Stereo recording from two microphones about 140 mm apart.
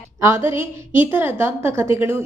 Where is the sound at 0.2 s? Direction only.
20° right (ahead or behind).